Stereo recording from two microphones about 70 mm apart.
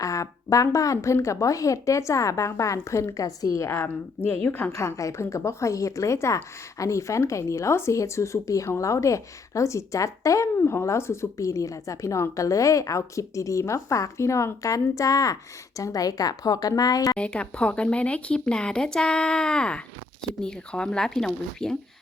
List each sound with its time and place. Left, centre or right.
0.0 s speech: left
3.7 s speech: left
4.7 s a woman's voice: left
17.2 s speech: centre